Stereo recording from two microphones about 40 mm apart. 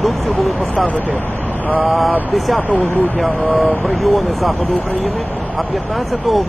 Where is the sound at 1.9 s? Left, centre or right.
Centre.